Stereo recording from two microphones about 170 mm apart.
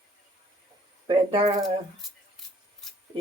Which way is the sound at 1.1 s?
35° right (ahead or behind).